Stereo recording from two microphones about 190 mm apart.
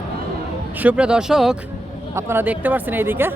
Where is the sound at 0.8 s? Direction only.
5° right (ahead or behind).